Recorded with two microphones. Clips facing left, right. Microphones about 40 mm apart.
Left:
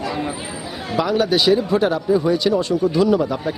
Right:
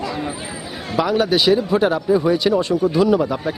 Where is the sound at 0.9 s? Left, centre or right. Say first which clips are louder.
Right 1 dB; centre.